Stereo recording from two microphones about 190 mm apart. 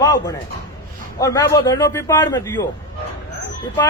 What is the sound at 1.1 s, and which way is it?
A man's voice, 20° left (ahead or behind).